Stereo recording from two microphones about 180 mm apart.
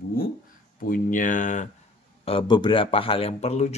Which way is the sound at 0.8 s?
50° left (ahead or behind).